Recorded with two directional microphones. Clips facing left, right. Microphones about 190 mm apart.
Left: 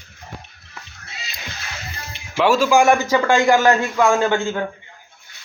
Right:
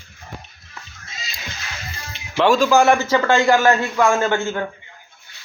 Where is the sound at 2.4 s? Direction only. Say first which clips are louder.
Even; 10° left (ahead or behind).